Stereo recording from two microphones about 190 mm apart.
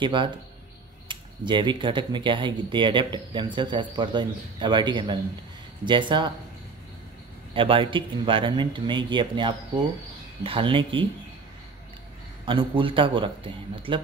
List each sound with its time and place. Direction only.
0.0 s speech: 25° right (ahead or behind)
7.5 s speech: 25° right (ahead or behind)
12.4 s speech: 25° right (ahead or behind)